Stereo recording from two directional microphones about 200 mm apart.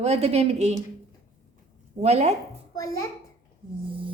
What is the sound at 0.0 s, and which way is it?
Speech, 30° right (ahead or behind).